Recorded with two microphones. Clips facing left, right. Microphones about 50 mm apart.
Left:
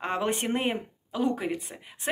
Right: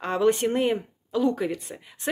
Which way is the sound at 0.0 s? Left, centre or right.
Left.